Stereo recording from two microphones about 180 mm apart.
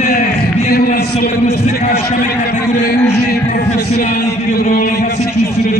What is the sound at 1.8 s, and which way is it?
A man's voice, 55° left (ahead or behind).